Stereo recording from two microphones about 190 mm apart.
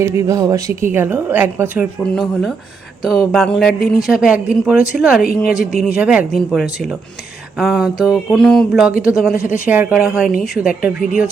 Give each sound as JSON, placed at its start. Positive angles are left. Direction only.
{"t": 0.0, "sound": "a woman's voice", "side_deg": -15}
{"t": 3.0, "sound": "a woman's voice", "side_deg": 0}